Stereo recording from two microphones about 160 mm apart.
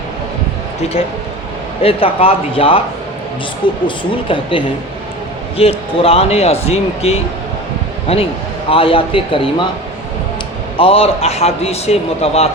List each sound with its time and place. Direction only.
1.8 s a man's voice: 35° left (ahead or behind)
3.8 s a man's voice: 30° left (ahead or behind)
10.8 s a man's voice: 35° left (ahead or behind)